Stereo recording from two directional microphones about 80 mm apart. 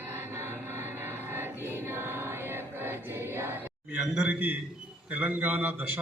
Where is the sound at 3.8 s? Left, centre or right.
Centre.